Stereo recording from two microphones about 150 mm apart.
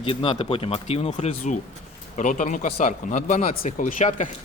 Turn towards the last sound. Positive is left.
turn(degrees=55)  # may be behind; listen again after turning